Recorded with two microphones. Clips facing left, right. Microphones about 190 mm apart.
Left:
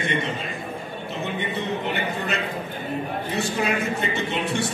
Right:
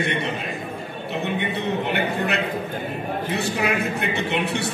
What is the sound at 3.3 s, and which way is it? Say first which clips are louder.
A man's voice: right 1 dB; 65° right (ahead or behind).